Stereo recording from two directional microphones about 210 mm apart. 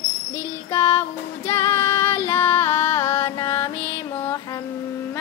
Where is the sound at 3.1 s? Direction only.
25° left (ahead or behind).